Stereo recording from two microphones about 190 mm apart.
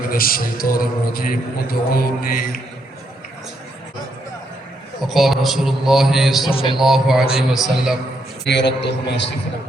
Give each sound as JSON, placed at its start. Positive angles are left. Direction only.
{"t": 0.1, "sound": "a man's voice", "side_deg": 50}
{"t": 5.0, "sound": "a man's voice", "side_deg": 0}
{"t": 8.4, "sound": "a man's voice", "side_deg": 65}